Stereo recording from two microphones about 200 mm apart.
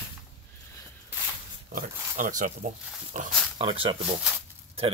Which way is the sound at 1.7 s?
40° right (ahead or behind).